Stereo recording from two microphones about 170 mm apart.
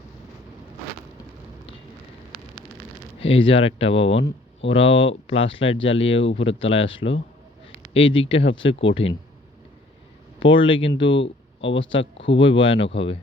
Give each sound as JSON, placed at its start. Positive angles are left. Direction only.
{"t": 3.2, "sound": "speech", "side_deg": 35}
{"t": 6.2, "sound": "speech", "side_deg": 90}
{"t": 6.6, "sound": "speech", "side_deg": 35}
{"t": 10.4, "sound": "speech", "side_deg": 30}
{"t": 10.9, "sound": "speech", "side_deg": 90}